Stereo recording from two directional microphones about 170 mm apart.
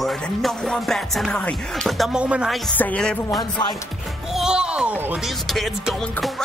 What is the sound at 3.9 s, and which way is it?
Speech, centre (ahead or behind).